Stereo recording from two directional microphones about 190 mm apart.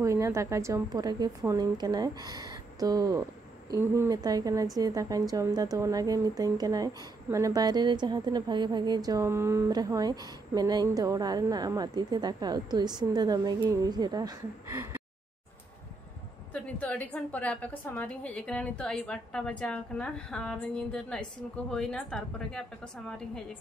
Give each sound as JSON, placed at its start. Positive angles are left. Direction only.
{"t": 0.0, "sound": "a woman's voice", "side_deg": -15}
{"t": 16.5, "sound": "a woman's voice", "side_deg": 5}